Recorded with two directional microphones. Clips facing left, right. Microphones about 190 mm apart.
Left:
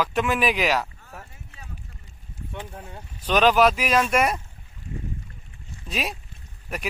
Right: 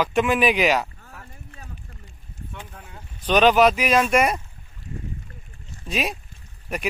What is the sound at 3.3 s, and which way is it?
Speech, centre (ahead or behind).